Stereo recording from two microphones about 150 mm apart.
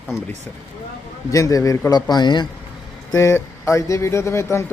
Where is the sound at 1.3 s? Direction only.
20° left (ahead or behind).